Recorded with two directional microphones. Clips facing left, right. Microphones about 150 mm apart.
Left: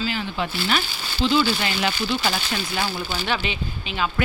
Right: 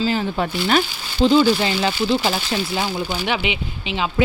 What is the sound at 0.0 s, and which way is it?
Speech, 40° right (ahead or behind).